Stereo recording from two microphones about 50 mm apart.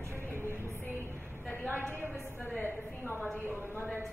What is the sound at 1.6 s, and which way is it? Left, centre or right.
Speech, left.